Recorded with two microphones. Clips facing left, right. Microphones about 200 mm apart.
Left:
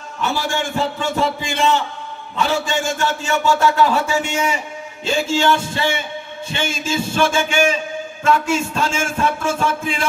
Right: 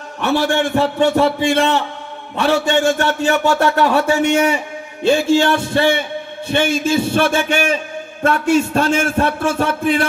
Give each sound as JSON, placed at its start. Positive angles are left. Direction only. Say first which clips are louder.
{"t": 0.2, "sound": "a man's voice", "louder": "right 6 dB", "side_deg": -65}